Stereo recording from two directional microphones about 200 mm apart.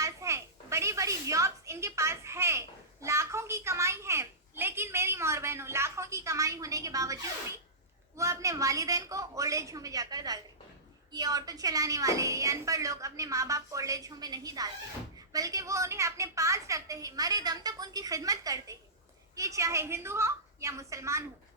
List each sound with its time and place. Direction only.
0.0 s a child's voice: 15° right (ahead or behind)